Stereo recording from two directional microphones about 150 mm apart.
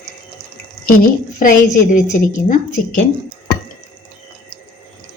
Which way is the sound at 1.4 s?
60° left (ahead or behind).